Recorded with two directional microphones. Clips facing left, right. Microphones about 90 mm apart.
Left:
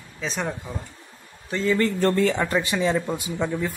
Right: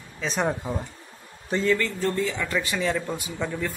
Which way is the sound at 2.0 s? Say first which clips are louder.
Left 5 dB; 70° left (ahead or behind).